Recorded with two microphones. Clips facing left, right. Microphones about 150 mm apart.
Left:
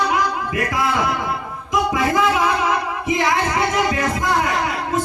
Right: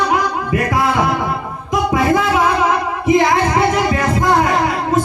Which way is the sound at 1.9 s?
40° right (ahead or behind).